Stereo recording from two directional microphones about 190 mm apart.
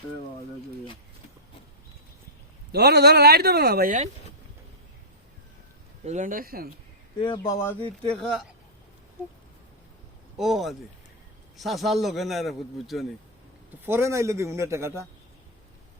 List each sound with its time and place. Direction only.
2.7 s speech: 60° right (ahead or behind); by 4.1 s 45° right (ahead or behind)
6.1 s speech: 40° right (ahead or behind)
7.2 s speech: 20° left (ahead or behind); by 8.4 s centre (ahead or behind)
9.2 s a man's voice: 10° right (ahead or behind)
10.3 s a man's voice: centre (ahead or behind)
13.8 s a man's voice: 15° right (ahead or behind)